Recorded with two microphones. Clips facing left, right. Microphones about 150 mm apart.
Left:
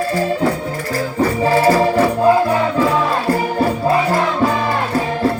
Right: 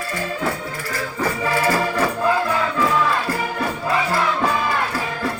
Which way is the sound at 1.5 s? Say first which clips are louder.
Left 7 dB; 30° left (ahead or behind).